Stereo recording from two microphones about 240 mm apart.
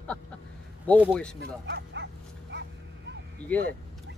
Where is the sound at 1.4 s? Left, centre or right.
Right.